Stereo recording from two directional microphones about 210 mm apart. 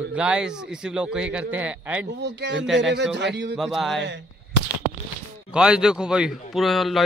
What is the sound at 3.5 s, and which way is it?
Speech, centre (ahead or behind).